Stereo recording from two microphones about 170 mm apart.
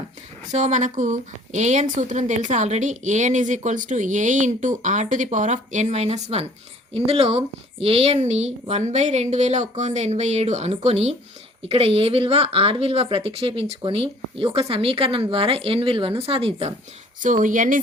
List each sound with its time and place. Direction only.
0.5 s speech: 45° right (ahead or behind)
17.2 s speech: 50° right (ahead or behind)